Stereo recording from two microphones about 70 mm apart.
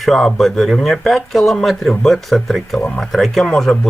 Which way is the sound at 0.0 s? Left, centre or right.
Centre.